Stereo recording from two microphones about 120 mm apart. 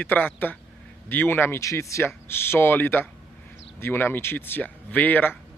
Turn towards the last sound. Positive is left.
turn(degrees=15)  # may be behind; listen again after turning